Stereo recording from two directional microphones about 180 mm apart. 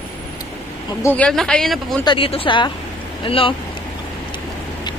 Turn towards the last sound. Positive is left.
turn(degrees=30)  # may be behind; listen again after turning